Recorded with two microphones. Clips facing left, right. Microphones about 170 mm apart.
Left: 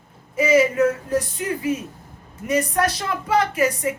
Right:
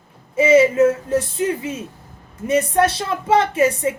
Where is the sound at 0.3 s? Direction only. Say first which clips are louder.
Right 4 dB; 25° right (ahead or behind).